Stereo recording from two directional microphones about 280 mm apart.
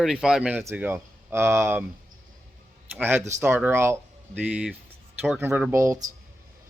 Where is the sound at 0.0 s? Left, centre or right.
Centre.